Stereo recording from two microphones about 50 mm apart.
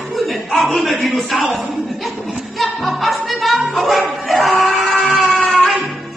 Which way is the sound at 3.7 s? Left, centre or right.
Centre.